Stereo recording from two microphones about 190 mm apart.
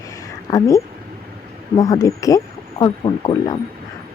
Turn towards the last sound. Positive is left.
turn(degrees=20)  # may be behind; listen again after turning